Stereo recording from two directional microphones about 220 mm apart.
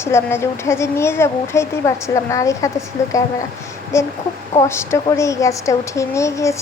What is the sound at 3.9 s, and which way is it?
Speech, 10° left (ahead or behind).